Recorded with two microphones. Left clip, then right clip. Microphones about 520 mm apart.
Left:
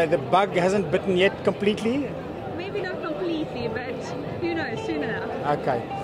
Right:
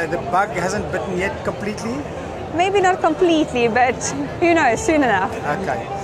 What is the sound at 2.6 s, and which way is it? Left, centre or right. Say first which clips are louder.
Speech: right 16 dB; right.